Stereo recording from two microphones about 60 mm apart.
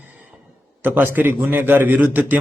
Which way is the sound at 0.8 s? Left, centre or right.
Right.